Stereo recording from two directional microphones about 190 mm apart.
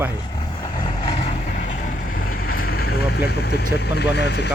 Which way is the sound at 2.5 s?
50° left (ahead or behind).